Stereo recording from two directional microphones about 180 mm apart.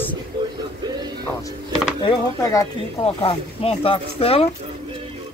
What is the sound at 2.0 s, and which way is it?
Speech, 20° left (ahead or behind).